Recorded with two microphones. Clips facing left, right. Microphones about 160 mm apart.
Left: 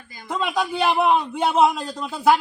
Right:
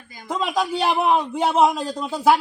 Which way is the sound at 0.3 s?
5° right (ahead or behind).